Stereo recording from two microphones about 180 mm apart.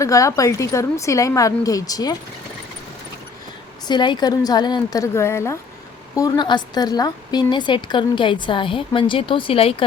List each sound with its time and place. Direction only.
0.0 s a woman's voice: 20° left (ahead or behind)
3.8 s a woman's voice: 25° left (ahead or behind)